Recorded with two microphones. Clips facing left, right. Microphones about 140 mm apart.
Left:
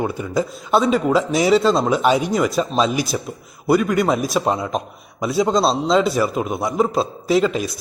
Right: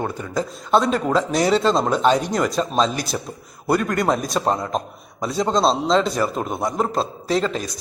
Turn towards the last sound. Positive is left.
turn(degrees=5)  # may be behind; listen again after turning